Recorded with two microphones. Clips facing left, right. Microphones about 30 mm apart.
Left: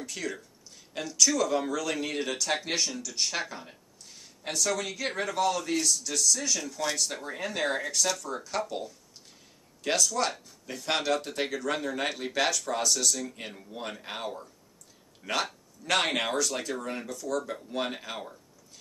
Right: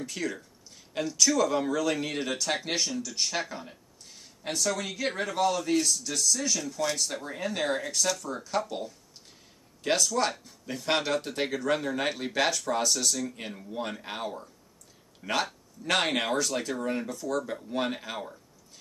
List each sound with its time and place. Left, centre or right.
0.0 s speech: centre
6.7 s speech: centre
8.5 s speech: centre
13.2 s speech: centre
17.5 s speech: centre